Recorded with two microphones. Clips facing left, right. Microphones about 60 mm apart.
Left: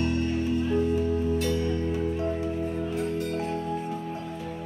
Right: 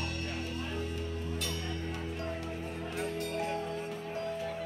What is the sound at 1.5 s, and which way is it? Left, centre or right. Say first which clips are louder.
Music: left 11 dB; centre.